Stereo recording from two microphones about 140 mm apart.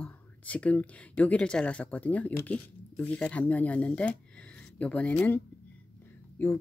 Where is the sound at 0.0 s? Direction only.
10° left (ahead or behind).